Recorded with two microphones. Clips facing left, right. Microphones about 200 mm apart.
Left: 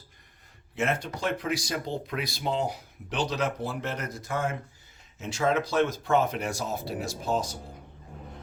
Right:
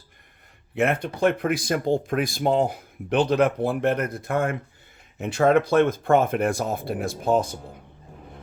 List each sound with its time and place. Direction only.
0.8 s speech: 60° right (ahead or behind)